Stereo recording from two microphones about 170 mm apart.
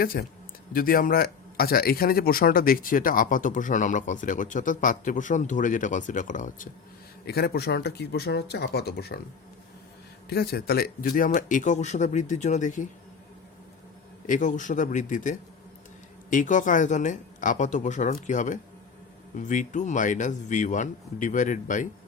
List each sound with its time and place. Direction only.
0.0 s speech: 60° left (ahead or behind)
7.3 s speech: 65° left (ahead or behind)
10.2 s speech: 65° left (ahead or behind); by 12.9 s 45° left (ahead or behind)
14.3 s speech: 50° left (ahead or behind)